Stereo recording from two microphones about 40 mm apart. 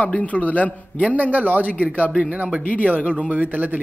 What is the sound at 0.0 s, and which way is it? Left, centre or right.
Speech, left.